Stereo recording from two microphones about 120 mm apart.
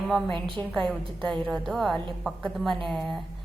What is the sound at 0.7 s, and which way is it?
A woman's voice, 5° left (ahead or behind).